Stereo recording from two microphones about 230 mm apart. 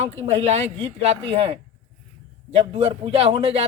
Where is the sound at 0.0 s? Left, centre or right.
Right.